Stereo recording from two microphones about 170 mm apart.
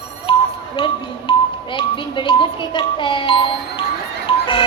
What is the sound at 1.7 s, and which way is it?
Music, 30° left (ahead or behind).